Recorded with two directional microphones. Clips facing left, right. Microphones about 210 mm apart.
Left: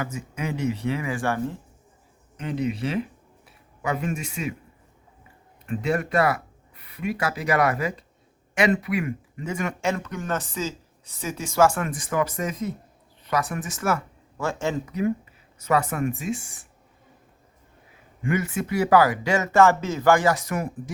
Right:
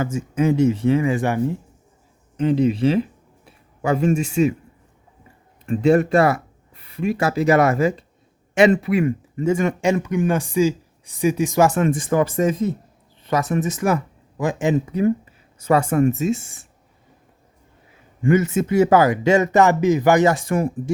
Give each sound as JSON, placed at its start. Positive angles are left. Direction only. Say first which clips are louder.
{"t": 0.0, "sound": "speech", "louder": "right 10 dB", "side_deg": -25}
{"t": 2.4, "sound": "speech", "louder": "right 9 dB", "side_deg": -30}
{"t": 5.6, "sound": "speech", "louder": "right 9 dB", "side_deg": -30}
{"t": 9.8, "sound": "speech", "louder": "right 8 dB", "side_deg": -15}
{"t": 14.9, "sound": "a sound", "louder": "right 6 dB", "side_deg": -30}
{"t": 15.9, "sound": "speech", "louder": "right 9 dB", "side_deg": -30}
{"t": 18.2, "sound": "speech", "louder": "right 8 dB", "side_deg": -25}